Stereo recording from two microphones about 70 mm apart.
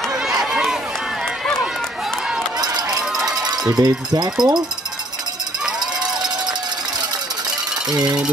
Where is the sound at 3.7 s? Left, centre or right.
Right.